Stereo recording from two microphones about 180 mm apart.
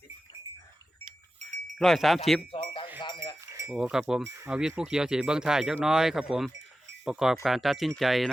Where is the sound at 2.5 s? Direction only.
30° left (ahead or behind).